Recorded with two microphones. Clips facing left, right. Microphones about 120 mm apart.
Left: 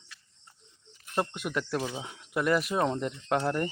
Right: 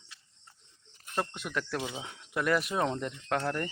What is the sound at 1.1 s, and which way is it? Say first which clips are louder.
Speech: left 3 dB; 20° left (ahead or behind).